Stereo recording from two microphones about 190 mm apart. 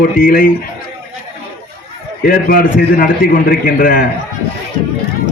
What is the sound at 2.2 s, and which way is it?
A man's voice, 50° left (ahead or behind).